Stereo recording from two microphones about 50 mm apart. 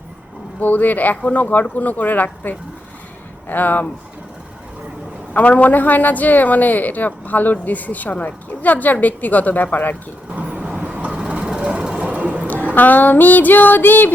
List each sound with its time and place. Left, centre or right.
0.6 s a woman's voice: left
5.3 s a woman's voice: left
10.3 s vehicle: right
12.1 s a sound: right
12.7 s a woman's voice: left